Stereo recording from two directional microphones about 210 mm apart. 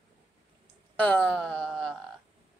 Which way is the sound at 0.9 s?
5° left (ahead or behind).